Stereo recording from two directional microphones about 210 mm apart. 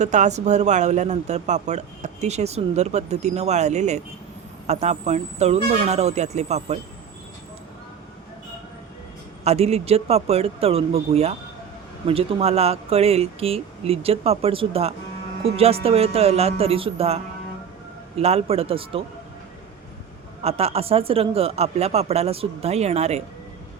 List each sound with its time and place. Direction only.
0.0 s speech: 35° right (ahead or behind)
9.4 s speech: 30° right (ahead or behind)
18.2 s speech: 30° right (ahead or behind)
20.4 s speech: 30° right (ahead or behind)